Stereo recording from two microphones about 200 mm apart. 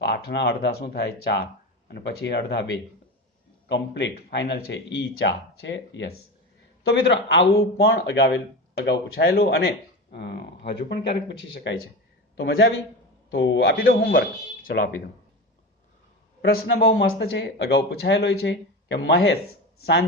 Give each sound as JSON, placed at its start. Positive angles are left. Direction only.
{"t": 0.0, "sound": "a man's voice", "side_deg": 60}
{"t": 16.4, "sound": "a man's voice", "side_deg": 55}